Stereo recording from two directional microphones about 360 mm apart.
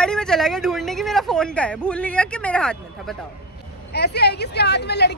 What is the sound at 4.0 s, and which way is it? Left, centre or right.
A woman's voice, left.